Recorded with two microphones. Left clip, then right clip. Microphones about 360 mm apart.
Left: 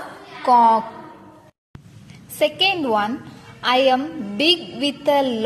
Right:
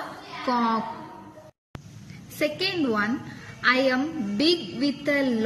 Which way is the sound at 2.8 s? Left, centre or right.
Left.